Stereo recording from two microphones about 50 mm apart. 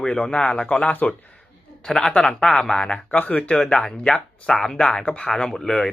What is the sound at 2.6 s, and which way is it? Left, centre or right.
Speech, centre.